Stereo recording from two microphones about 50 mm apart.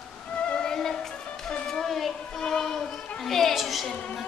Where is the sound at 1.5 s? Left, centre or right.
Centre.